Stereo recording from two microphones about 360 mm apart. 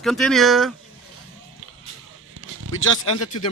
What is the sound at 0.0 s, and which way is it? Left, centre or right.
Speech, centre.